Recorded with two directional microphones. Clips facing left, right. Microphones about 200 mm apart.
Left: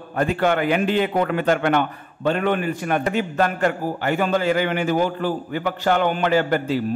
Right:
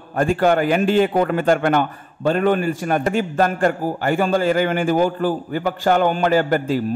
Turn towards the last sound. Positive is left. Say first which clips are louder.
# right 2 dB
turn(degrees=-45)  # may be behind; listen again after turning